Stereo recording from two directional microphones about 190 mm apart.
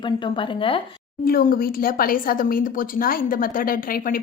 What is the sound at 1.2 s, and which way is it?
Speech, 50° left (ahead or behind).